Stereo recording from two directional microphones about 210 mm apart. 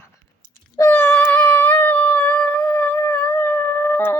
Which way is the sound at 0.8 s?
10° left (ahead or behind).